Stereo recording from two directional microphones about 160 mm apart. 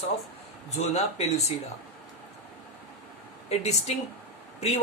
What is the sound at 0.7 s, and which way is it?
Speech, 45° left (ahead or behind).